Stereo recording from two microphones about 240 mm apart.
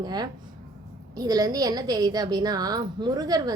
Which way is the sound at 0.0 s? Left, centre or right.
Centre.